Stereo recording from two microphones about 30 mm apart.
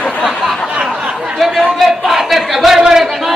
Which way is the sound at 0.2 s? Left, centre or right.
Centre.